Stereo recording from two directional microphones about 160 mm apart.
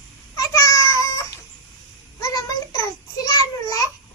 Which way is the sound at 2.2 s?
20° left (ahead or behind).